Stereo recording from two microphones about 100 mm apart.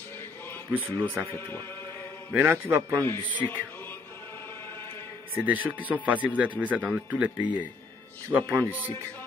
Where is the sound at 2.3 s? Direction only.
20° right (ahead or behind).